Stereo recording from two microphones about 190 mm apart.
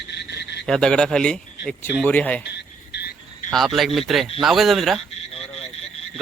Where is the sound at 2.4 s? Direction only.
60° left (ahead or behind).